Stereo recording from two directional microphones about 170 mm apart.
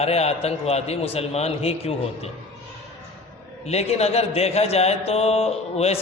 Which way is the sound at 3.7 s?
40° left (ahead or behind).